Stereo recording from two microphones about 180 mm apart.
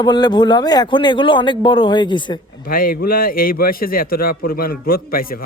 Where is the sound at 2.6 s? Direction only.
55° left (ahead or behind).